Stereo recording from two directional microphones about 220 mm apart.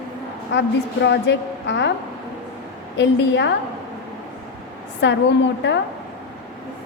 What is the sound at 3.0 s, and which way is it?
Speech, 55° left (ahead or behind).